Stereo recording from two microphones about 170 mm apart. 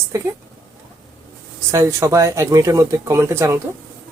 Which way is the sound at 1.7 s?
15° right (ahead or behind).